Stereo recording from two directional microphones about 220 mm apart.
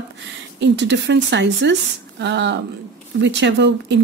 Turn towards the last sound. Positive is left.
turn(degrees=-55)  # may be behind; listen again after turning